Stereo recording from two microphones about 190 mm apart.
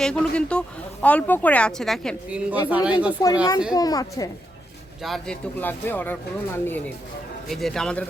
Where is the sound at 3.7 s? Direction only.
20° left (ahead or behind).